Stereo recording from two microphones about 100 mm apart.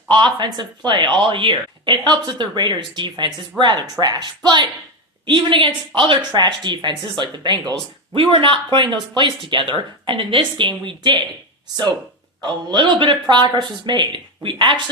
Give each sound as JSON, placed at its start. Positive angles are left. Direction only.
{"t": 0.1, "sound": "speech", "side_deg": -50}
{"t": 8.1, "sound": "speech", "side_deg": -65}
{"t": 12.4, "sound": "speech", "side_deg": -50}